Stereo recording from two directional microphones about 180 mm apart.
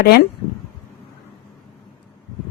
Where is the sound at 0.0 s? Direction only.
60° left (ahead or behind).